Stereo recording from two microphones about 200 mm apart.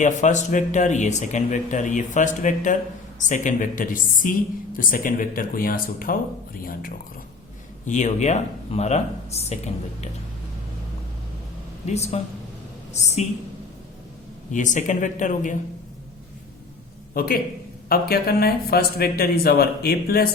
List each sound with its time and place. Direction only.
0.0 s speech: 35° left (ahead or behind)
11.9 s a woman's voice: 35° left (ahead or behind)
14.5 s speech: 40° left (ahead or behind)
17.2 s speech: 45° left (ahead or behind)